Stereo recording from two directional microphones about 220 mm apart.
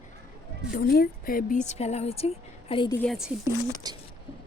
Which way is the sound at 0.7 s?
45° left (ahead or behind).